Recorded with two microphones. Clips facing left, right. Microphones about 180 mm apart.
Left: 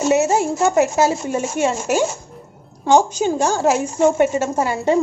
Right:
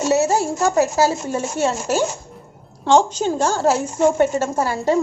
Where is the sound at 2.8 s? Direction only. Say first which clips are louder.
Left 1 dB; 10° left (ahead or behind).